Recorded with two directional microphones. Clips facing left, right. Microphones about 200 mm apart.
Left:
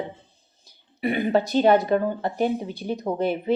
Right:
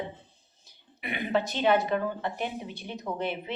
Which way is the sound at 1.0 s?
35° left (ahead or behind).